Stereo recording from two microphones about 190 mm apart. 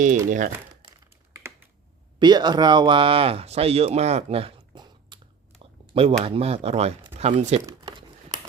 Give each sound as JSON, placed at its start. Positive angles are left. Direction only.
{"t": 0.3, "sound": "speech", "side_deg": -40}
{"t": 1.3, "sound": "typing", "side_deg": -15}
{"t": 2.1, "sound": "speech", "side_deg": -25}
{"t": 7.7, "sound": "crumpling", "side_deg": -20}